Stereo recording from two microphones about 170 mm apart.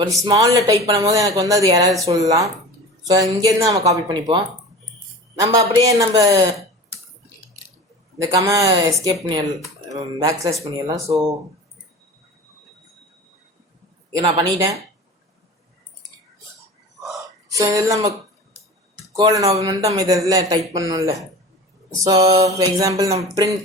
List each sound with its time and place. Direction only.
0.0 s speech: 20° right (ahead or behind)
6.0 s speech: 20° right (ahead or behind)
8.2 s speech: 20° right (ahead or behind)
14.2 s speech: 20° right (ahead or behind)
17.5 s speech: 20° right (ahead or behind)
19.1 s speech: 20° right (ahead or behind)